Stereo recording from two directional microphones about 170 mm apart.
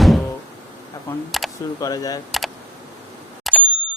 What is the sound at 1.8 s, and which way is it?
Speech, 20° left (ahead or behind).